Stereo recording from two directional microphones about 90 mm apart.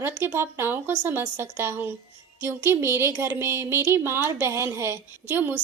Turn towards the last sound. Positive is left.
turn(degrees=-25)  # may be behind; listen again after turning